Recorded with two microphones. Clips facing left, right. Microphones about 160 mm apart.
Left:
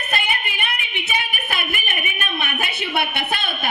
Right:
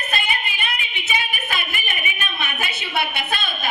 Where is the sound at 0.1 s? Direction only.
60° left (ahead or behind).